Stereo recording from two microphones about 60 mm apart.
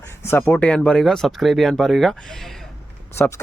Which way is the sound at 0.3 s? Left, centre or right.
Left.